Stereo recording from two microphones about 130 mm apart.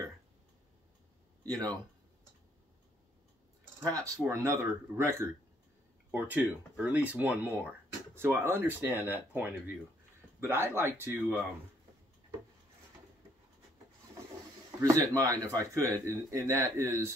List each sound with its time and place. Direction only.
1.5 s speech: 30° right (ahead or behind)
3.8 s speech: 25° right (ahead or behind)
14.8 s speech: 25° right (ahead or behind)